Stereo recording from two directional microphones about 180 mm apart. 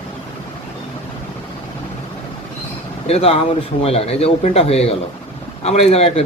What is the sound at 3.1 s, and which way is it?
Speech, 35° left (ahead or behind).